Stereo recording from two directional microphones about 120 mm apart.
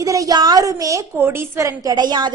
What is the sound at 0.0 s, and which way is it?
A woman's voice, 30° right (ahead or behind).